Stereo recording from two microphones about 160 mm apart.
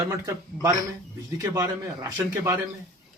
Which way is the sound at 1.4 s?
15° right (ahead or behind).